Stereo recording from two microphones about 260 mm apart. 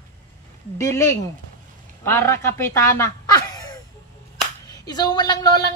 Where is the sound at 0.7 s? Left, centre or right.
Centre.